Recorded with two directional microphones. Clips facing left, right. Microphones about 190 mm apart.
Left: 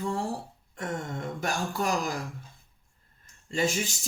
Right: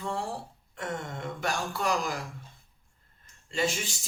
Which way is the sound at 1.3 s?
45° left (ahead or behind).